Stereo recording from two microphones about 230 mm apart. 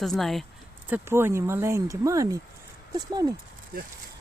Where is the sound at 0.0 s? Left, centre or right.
Centre.